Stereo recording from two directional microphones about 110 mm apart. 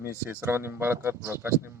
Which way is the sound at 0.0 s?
20° right (ahead or behind).